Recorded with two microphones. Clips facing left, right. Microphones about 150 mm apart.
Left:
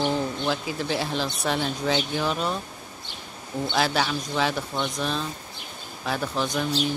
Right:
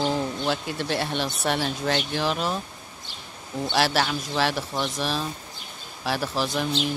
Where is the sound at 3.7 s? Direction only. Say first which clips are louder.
Right 1 dB; centre (ahead or behind).